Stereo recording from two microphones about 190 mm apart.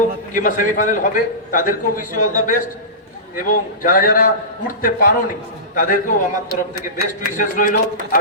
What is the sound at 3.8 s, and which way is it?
A man's voice, 45° left (ahead or behind).